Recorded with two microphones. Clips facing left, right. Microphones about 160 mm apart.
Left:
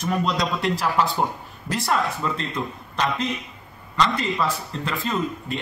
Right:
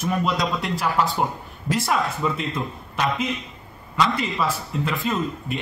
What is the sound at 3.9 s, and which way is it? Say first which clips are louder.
A man's voice: even; 10° right (ahead or behind).